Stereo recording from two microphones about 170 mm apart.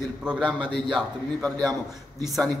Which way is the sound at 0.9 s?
5° left (ahead or behind).